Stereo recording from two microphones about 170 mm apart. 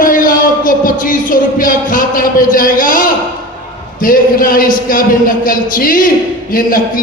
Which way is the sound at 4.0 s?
55° left (ahead or behind).